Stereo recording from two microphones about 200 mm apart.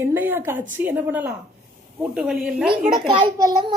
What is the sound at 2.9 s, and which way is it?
Speech, 25° right (ahead or behind).